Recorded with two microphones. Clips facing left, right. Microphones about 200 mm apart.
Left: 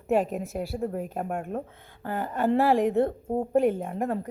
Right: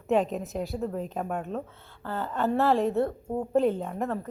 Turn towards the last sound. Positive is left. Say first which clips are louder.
# left 1 dB
turn(degrees=10)  # may be behind; listen again after turning